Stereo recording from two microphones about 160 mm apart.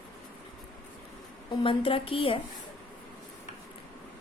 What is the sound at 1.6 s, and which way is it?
Speech, 35° left (ahead or behind).